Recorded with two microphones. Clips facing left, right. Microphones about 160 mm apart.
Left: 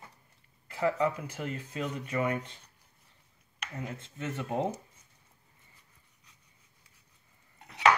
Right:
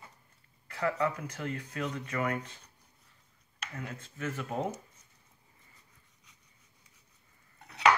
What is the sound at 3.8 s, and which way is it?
Speech, 20° left (ahead or behind).